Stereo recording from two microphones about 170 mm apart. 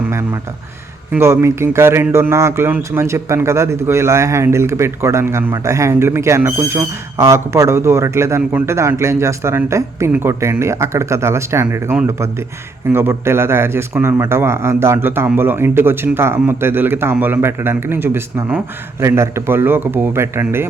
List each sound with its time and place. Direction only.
1.1 s a man's voice: 15° right (ahead or behind)